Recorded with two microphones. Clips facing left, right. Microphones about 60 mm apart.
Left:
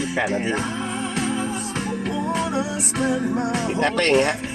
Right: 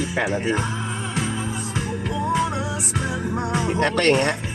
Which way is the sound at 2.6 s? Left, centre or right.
Left.